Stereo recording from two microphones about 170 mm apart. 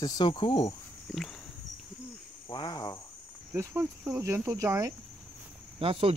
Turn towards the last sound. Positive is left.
turn(degrees=-30)  # may be behind; listen again after turning